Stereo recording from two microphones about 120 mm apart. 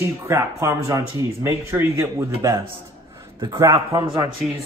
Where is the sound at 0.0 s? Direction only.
25° right (ahead or behind).